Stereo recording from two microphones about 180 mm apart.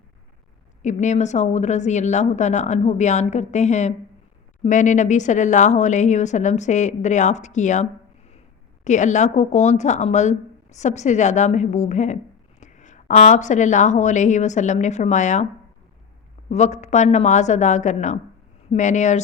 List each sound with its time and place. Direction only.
0.8 s speech: 40° left (ahead or behind)
16.5 s speech: 40° left (ahead or behind)